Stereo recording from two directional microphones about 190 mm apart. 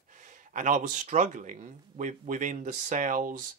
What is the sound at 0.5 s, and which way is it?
Speech, 40° right (ahead or behind).